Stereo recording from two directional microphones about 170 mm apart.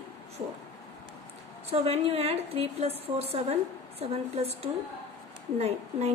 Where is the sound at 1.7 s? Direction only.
35° right (ahead or behind).